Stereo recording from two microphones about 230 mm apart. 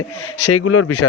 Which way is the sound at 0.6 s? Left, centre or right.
Left.